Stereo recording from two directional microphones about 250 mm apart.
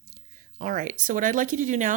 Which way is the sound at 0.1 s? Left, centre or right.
Right.